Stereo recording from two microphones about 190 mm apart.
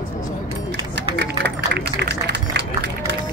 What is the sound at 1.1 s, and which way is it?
Run, 65° right (ahead or behind).